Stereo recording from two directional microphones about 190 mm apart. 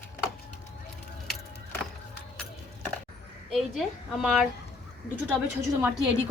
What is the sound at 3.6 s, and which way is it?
Speech, centre (ahead or behind).